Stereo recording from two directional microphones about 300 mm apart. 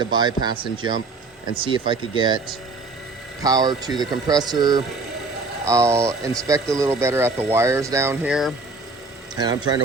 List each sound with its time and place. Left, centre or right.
0.0 s speech: centre
3.4 s speech: centre
9.3 s speech: centre